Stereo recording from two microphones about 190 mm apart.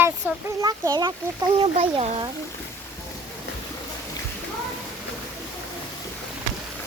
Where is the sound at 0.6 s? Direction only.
20° right (ahead or behind).